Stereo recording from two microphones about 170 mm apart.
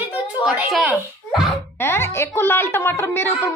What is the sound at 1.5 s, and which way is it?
Speech, 15° left (ahead or behind).